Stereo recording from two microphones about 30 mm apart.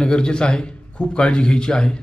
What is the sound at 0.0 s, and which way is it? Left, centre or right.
A man's voice, left.